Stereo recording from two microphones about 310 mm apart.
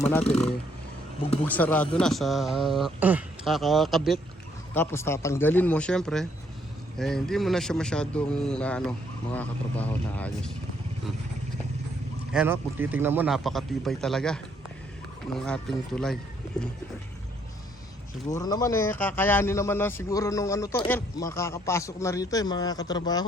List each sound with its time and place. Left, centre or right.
0.0 s a man's voice: centre
0.3 s speech: centre
1.5 s a man's voice: centre
12.3 s a man's voice: centre
15.4 s a man's voice: centre
18.3 s a man's voice: centre